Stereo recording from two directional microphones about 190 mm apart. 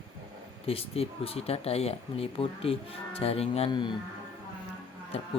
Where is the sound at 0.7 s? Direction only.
30° left (ahead or behind).